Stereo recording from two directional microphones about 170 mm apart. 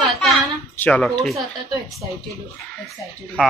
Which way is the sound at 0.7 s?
10° left (ahead or behind).